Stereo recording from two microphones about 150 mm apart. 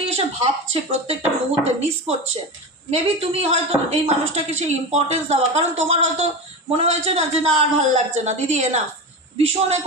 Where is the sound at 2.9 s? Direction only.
40° right (ahead or behind).